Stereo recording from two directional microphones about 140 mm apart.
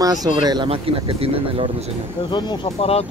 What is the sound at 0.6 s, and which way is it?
Speech, 40° right (ahead or behind).